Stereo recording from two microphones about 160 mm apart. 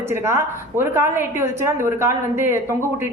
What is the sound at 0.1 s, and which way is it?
A woman's voice, 15° right (ahead or behind).